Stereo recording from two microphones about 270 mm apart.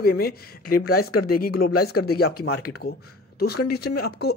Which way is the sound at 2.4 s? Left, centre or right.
Left.